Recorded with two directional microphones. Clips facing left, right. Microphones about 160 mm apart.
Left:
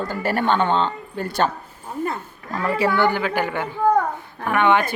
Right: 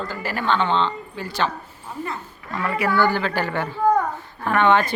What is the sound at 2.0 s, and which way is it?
Speech, 40° left (ahead or behind).